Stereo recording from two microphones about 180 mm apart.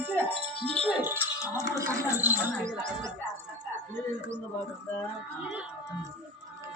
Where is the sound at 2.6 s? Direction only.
40° right (ahead or behind).